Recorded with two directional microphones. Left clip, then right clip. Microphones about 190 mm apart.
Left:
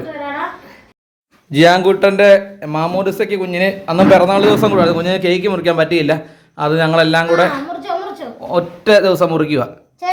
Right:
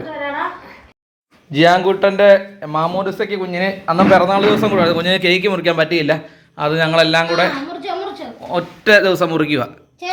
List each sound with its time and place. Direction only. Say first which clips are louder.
1.5 s speech: left 2 dB; 20° left (ahead or behind)
4.8 s a man's voice: left 1 dB; 10° left (ahead or behind)